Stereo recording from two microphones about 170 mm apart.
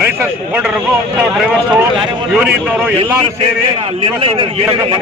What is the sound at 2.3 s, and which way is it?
Speech, 5° right (ahead or behind).